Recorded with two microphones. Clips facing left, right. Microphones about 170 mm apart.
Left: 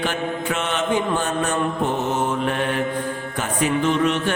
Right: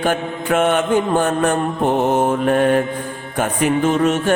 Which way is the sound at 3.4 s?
50° right (ahead or behind).